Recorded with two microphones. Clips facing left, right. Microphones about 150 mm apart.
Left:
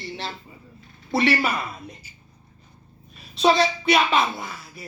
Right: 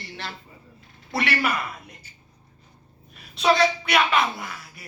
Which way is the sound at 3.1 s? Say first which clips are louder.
Left 2 dB; 25° left (ahead or behind).